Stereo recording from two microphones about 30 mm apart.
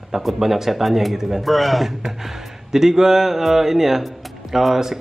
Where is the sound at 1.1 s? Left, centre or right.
Centre.